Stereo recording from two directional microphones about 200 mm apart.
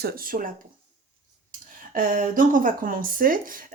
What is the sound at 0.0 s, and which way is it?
Speech, 45° right (ahead or behind).